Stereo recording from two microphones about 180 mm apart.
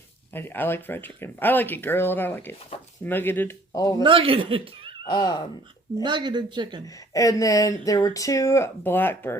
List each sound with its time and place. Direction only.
0.3 s speech: 10° left (ahead or behind)
4.0 s speech: 30° right (ahead or behind)
5.0 s speech: 25° left (ahead or behind)
6.0 s speech: 25° right (ahead or behind)
6.8 s speech: 20° left (ahead or behind)